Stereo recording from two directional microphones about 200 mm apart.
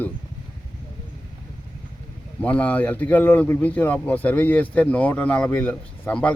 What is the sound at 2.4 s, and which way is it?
Speech, 5° left (ahead or behind).